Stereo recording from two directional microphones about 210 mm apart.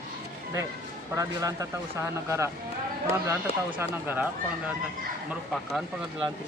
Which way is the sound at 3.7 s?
10° right (ahead or behind).